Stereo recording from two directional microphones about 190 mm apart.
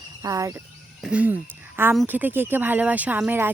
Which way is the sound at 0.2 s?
15° right (ahead or behind).